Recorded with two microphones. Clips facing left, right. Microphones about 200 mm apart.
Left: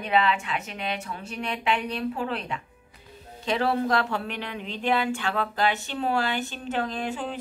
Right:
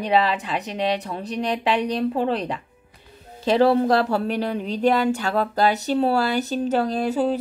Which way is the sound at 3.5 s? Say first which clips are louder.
Right 7 dB; 35° right (ahead or behind).